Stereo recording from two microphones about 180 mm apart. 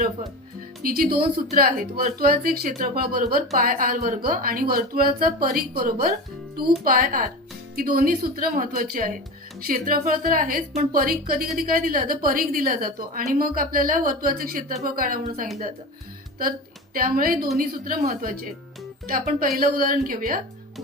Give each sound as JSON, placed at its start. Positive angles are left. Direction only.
{"t": 0.8, "sound": "a woman's voice", "side_deg": -55}
{"t": 16.4, "sound": "a woman's voice", "side_deg": -50}